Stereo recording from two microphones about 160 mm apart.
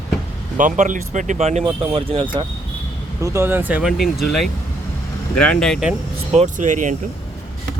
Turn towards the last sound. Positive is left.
turn(degrees=-50)  # may be behind; listen again after turning